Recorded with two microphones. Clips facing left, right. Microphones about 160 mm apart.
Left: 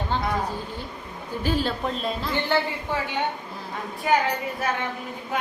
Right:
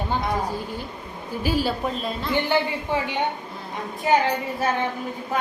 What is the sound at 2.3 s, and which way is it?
Speech, 15° right (ahead or behind).